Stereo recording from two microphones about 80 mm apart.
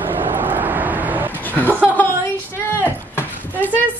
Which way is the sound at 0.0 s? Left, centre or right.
Right.